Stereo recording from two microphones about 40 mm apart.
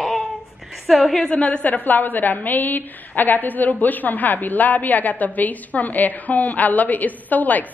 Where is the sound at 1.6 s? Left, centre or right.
Left.